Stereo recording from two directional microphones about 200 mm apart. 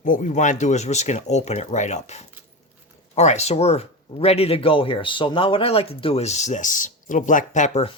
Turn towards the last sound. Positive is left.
turn(degrees=35)  # may be behind; listen again after turning